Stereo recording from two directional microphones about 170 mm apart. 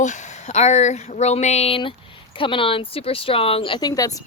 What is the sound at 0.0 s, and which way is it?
Speech, 45° left (ahead or behind).